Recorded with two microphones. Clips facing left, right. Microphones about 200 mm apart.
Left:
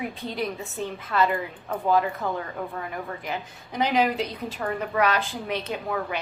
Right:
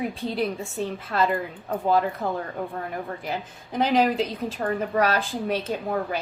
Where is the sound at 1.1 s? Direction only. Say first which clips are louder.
Even; 40° right (ahead or behind).